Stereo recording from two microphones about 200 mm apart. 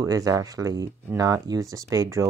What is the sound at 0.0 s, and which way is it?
Speech, 15° right (ahead or behind).